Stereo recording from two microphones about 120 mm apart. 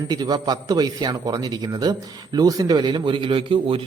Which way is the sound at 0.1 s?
35° right (ahead or behind).